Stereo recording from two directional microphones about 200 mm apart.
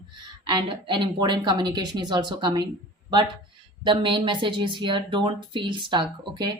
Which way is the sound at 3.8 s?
25° right (ahead or behind).